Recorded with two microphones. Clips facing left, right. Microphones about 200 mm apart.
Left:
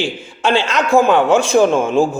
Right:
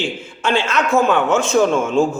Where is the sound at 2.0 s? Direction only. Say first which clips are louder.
Left 1 dB; 35° left (ahead or behind).